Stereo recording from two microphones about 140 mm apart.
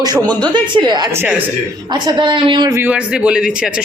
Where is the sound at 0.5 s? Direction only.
35° right (ahead or behind).